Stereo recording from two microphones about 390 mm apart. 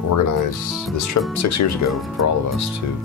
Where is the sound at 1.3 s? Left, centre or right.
Left.